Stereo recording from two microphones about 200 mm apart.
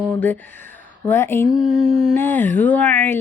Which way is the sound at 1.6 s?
30° right (ahead or behind).